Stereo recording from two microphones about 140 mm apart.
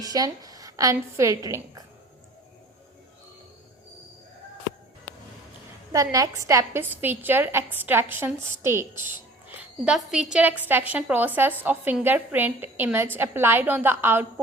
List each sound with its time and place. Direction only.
0.0 s a woman's voice: 25° right (ahead or behind)
5.9 s a woman's voice: 25° right (ahead or behind)
9.8 s a woman's voice: 5° right (ahead or behind)